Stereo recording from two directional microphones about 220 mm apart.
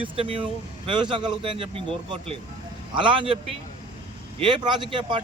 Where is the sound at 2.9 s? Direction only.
20° right (ahead or behind).